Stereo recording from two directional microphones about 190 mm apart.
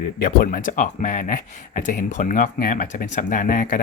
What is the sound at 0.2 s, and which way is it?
Speech, 50° left (ahead or behind).